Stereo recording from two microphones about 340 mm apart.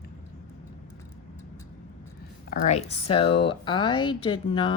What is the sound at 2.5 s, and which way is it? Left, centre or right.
Speech, centre.